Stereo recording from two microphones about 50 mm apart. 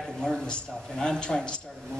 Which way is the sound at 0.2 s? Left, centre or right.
Centre.